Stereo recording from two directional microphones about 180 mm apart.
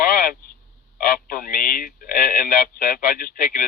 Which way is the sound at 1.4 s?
50° left (ahead or behind).